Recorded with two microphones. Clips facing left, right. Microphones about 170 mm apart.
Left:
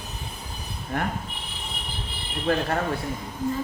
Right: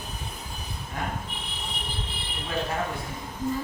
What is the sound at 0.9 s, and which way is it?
Speech, 70° left (ahead or behind).